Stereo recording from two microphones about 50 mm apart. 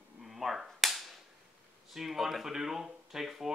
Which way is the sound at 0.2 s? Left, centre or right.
Centre.